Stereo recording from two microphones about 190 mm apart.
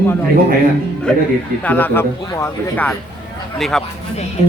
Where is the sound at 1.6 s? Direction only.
10° left (ahead or behind).